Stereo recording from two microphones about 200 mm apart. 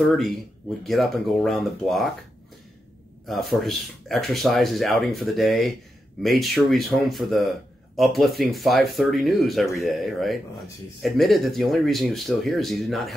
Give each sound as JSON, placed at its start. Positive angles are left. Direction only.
{"t": 0.8, "sound": "speech", "side_deg": 0}
{"t": 3.3, "sound": "speech", "side_deg": 0}